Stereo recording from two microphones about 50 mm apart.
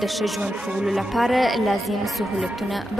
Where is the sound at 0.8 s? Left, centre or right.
Centre.